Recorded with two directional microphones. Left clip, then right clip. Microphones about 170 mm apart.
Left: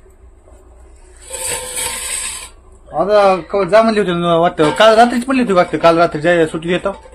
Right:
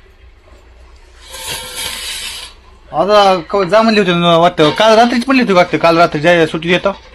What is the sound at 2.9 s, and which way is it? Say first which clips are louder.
A man's voice: right 2 dB; 15° right (ahead or behind).